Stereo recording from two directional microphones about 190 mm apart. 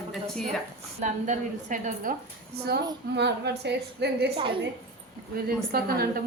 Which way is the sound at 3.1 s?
60° right (ahead or behind).